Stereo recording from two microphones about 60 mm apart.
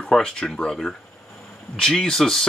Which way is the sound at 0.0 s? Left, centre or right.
Centre.